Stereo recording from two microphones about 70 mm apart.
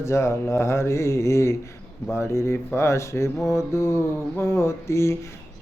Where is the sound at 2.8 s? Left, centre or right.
Left.